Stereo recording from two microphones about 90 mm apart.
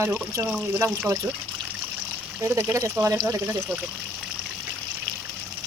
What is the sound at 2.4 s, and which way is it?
Speech, 30° right (ahead or behind).